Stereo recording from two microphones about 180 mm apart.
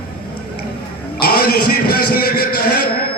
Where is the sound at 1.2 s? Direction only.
55° left (ahead or behind).